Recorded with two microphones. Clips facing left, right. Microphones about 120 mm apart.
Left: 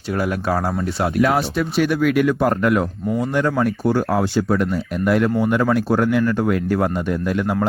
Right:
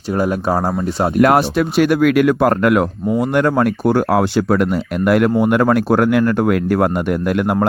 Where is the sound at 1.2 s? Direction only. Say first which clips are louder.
Right 6 dB; 70° right (ahead or behind).